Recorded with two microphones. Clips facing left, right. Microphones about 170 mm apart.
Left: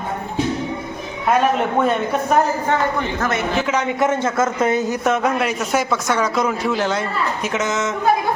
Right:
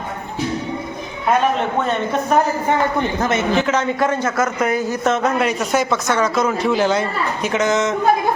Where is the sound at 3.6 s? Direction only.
10° left (ahead or behind).